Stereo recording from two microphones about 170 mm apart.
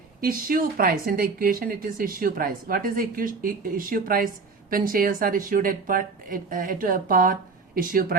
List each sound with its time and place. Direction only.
0.2 s speech: 55° right (ahead or behind)